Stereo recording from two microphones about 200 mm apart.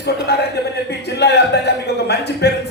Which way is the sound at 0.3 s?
55° left (ahead or behind).